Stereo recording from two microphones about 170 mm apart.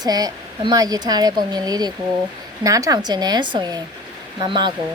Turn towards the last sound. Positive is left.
turn(degrees=-30)  # may be behind; listen again after turning